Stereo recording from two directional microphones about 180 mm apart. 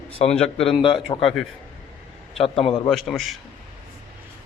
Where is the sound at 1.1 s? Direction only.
30° left (ahead or behind).